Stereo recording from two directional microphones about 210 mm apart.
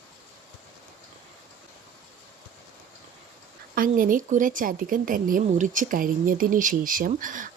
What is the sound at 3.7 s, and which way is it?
A woman's voice, 40° right (ahead or behind).